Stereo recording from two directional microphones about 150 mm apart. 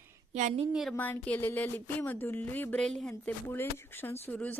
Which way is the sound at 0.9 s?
10° left (ahead or behind).